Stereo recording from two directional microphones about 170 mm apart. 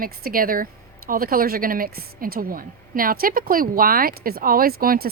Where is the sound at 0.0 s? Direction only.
60° right (ahead or behind).